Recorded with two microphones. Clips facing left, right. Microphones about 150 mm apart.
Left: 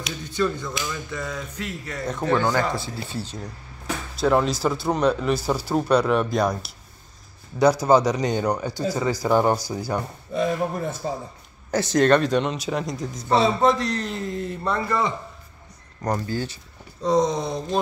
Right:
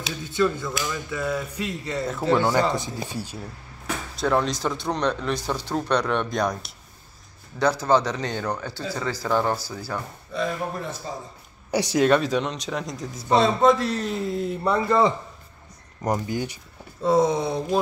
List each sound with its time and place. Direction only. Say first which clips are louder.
0.2 s a man's voice: right 2 dB; centre (ahead or behind)
4.2 s a man's voice: left 3 dB; 5° left (ahead or behind)
10.3 s speech: left 4 dB; 45° left (ahead or behind)
11.7 s a man's voice: left 1 dB; 10° right (ahead or behind)
14.9 s a man's voice: right 7 dB; 30° right (ahead or behind)
16.0 s speech: even; 15° right (ahead or behind)
17.0 s a man's voice: right 1 dB; 5° right (ahead or behind)